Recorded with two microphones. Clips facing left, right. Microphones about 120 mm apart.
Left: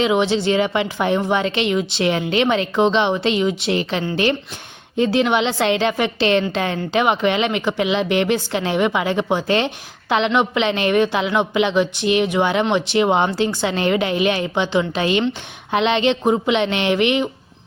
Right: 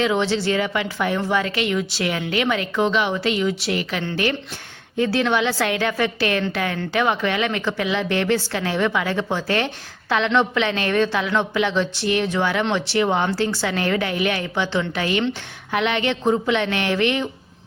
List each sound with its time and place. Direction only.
0.0 s speech: 15° left (ahead or behind)